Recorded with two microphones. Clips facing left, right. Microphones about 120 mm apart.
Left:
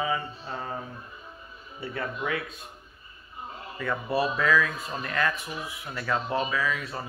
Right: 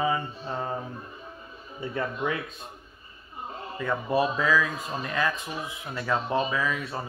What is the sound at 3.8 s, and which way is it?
Speech, 15° right (ahead or behind).